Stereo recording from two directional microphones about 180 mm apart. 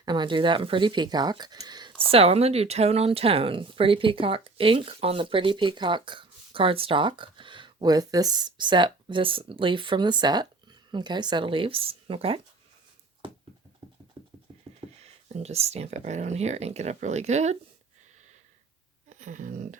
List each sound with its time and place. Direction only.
0.0 s speech: 25° right (ahead or behind)
13.8 s dog: 30° right (ahead or behind)
15.0 s speech: 35° right (ahead or behind)
19.0 s speech: 45° right (ahead or behind)